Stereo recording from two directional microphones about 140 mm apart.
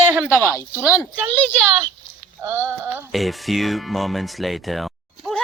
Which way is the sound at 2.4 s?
15° right (ahead or behind).